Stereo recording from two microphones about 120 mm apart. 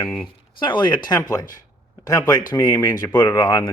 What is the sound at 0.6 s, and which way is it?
Speech, 40° left (ahead or behind).